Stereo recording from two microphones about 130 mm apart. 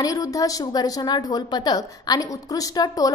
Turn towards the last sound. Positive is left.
turn(degrees=30)  # may be behind; listen again after turning